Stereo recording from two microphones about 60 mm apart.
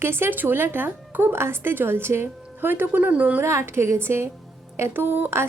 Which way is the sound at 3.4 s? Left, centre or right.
Right.